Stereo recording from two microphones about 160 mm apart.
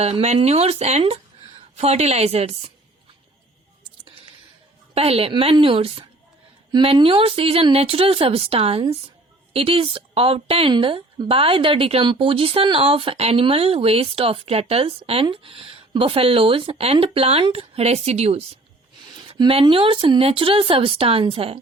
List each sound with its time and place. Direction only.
0.0 s a woman's voice: 40° right (ahead or behind)
4.9 s a woman's voice: 40° right (ahead or behind)